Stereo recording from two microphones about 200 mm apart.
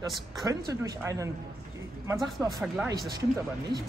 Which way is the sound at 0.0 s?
15° right (ahead or behind).